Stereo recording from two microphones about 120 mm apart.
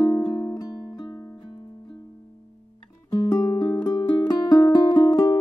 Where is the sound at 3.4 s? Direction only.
40° left (ahead or behind).